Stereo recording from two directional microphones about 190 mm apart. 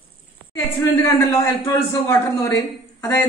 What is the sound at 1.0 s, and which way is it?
Speech, 15° left (ahead or behind).